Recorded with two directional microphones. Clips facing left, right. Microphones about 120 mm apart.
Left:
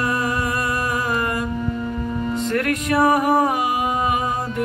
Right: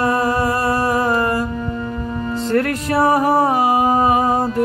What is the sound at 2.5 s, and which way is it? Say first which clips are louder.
Music: right 4 dB; 30° right (ahead or behind).